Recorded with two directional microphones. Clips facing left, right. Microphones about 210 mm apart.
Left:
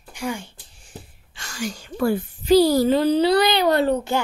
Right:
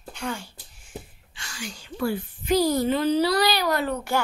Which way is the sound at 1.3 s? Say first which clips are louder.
Left 8 dB; 45° left (ahead or behind).